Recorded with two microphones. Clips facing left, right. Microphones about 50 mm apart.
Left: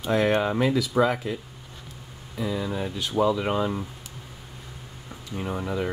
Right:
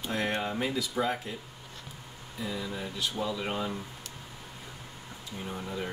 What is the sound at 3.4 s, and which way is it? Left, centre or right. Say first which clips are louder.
Speech: left 8 dB; left.